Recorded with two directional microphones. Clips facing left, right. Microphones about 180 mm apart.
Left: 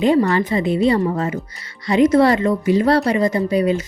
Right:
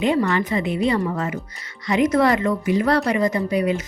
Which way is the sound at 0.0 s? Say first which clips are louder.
Left 4 dB; 35° left (ahead or behind).